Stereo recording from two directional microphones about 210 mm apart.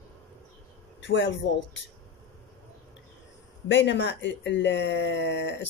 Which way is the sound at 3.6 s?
60° left (ahead or behind).